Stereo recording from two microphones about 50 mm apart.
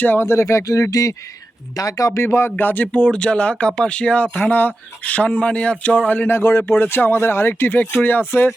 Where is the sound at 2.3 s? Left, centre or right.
Left.